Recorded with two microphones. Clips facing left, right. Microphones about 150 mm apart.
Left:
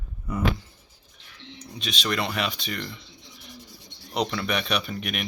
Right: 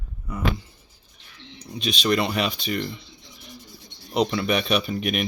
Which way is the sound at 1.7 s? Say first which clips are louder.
Right 6 dB; 15° right (ahead or behind).